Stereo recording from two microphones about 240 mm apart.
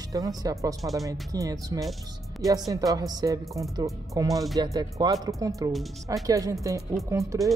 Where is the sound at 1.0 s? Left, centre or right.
Centre.